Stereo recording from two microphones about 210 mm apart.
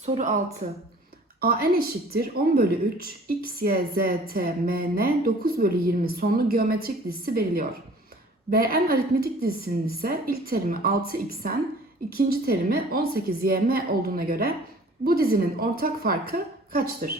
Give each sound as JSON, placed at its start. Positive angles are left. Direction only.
{"t": 0.0, "sound": "speech", "side_deg": -35}
{"t": 1.4, "sound": "a woman's voice", "side_deg": -45}